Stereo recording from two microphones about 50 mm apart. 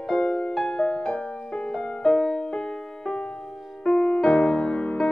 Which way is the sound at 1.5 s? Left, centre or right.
Centre.